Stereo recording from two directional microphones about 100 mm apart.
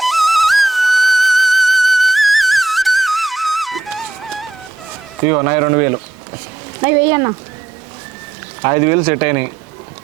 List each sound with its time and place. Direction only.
0.0 s music: centre (ahead or behind)
5.3 s speech: 30° right (ahead or behind)
8.6 s speech: 30° right (ahead or behind)